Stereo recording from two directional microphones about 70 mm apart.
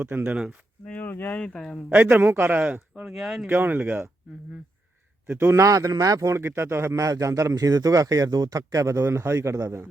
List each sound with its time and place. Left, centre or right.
0.0 s speech: right
0.3 s speech: centre
0.9 s speech: left
2.0 s speech: right
3.0 s speech: centre
3.4 s speech: right
5.5 s a man's voice: right
6.3 s a man's voice: right